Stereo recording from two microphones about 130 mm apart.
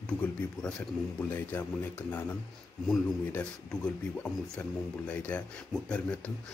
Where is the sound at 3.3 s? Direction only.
10° left (ahead or behind).